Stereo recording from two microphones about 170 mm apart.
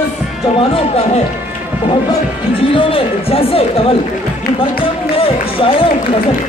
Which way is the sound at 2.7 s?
30° left (ahead or behind).